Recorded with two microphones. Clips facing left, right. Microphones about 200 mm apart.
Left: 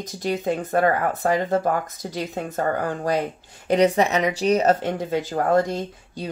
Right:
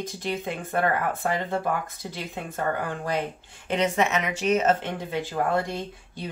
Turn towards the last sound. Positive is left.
turn(degrees=40)  # may be behind; listen again after turning